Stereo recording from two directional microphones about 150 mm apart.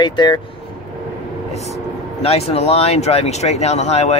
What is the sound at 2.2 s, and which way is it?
Speech, 45° left (ahead or behind).